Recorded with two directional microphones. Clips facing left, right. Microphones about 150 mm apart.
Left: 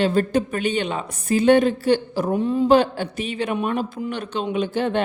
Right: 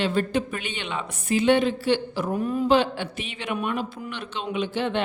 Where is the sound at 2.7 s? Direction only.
45° left (ahead or behind).